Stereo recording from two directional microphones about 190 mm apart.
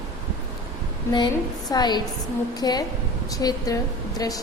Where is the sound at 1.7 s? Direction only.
20° left (ahead or behind).